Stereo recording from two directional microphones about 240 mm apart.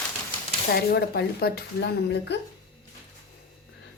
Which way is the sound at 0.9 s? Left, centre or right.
Left.